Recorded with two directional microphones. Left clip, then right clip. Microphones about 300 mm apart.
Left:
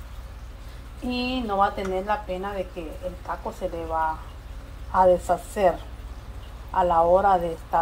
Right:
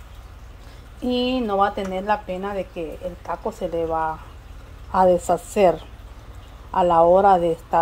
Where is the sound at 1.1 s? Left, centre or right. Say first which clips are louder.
Right 5 dB; right.